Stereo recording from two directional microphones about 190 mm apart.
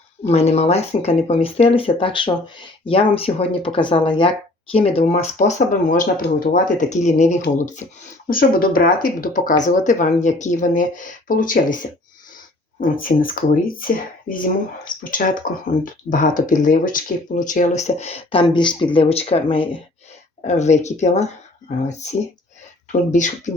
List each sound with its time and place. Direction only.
0.3 s speech: 35° left (ahead or behind)